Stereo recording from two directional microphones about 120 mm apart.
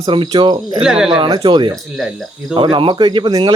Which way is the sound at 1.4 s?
40° right (ahead or behind).